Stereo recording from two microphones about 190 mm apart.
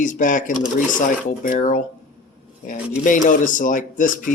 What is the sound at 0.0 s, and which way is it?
Speech, 40° left (ahead or behind).